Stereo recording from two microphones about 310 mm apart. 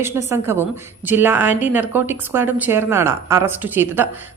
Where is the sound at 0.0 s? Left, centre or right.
Centre.